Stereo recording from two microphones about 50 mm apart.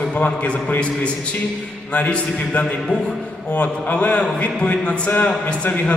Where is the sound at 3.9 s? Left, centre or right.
Left.